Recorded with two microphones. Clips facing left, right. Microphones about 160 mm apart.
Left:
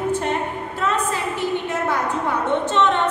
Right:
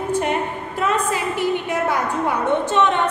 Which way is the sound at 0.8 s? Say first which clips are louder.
Right 2 dB; 10° right (ahead or behind).